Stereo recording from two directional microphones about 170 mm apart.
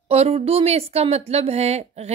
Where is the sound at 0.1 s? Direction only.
35° right (ahead or behind).